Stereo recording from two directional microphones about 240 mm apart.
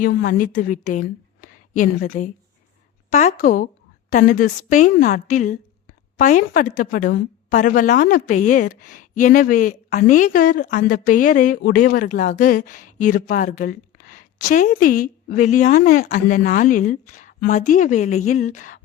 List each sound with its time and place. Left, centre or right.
0.0 s a woman's voice: left